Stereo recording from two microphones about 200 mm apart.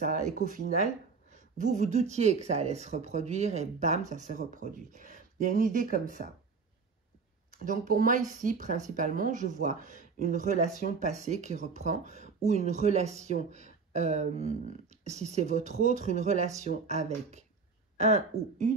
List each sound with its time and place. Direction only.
0.0 s speech: 40° right (ahead or behind)
7.6 s speech: 40° right (ahead or behind)